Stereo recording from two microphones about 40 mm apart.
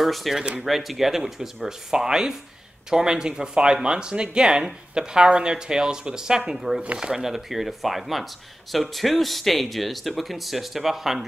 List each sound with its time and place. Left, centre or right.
0.0 s speech: centre